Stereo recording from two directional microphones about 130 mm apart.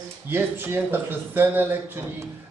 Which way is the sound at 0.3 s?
15° right (ahead or behind).